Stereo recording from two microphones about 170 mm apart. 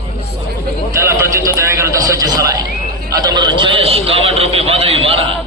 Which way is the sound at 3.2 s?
25° right (ahead or behind).